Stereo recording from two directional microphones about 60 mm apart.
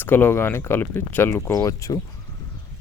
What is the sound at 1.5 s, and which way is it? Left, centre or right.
Speech, left.